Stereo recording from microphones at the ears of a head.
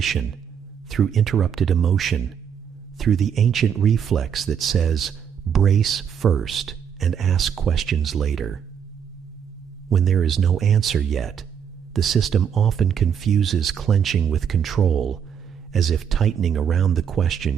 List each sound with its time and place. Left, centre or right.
0.0 s speech: right
9.9 s speech: right